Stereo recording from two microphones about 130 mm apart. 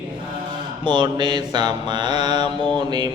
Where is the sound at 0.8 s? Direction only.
35° right (ahead or behind).